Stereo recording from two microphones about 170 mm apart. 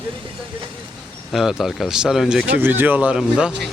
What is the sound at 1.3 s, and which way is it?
Speech, centre (ahead or behind).